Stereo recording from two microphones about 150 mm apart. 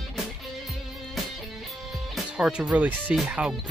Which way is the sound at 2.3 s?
5° right (ahead or behind).